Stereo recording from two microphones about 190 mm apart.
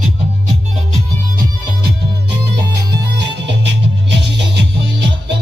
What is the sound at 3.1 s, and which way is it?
Music, 65° right (ahead or behind).